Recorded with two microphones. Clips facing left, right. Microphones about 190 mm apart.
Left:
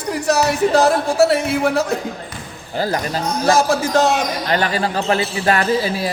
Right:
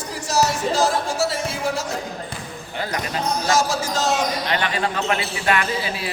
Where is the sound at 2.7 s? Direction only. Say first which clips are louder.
Left 6 dB; 35° left (ahead or behind).